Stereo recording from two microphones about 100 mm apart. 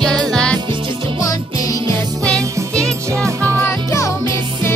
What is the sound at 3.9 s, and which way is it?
Music, 30° left (ahead or behind).